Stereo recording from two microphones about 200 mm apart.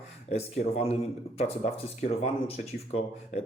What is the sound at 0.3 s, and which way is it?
Speech, 30° left (ahead or behind).